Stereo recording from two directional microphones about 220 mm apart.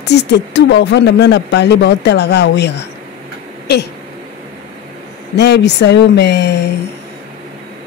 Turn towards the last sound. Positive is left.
turn(degrees=50)  # may be behind; listen again after turning